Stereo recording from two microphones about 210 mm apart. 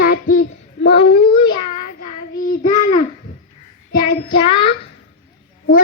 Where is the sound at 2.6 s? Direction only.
30° left (ahead or behind).